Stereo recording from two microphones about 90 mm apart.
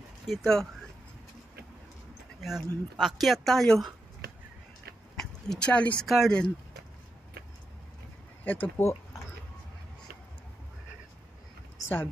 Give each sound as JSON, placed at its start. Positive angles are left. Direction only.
{"t": 0.3, "sound": "speech", "side_deg": 5}
{"t": 2.4, "sound": "speech", "side_deg": -5}
{"t": 5.1, "sound": "a sound", "side_deg": 5}
{"t": 6.0, "sound": "speech", "side_deg": 0}
{"t": 8.5, "sound": "speech", "side_deg": 25}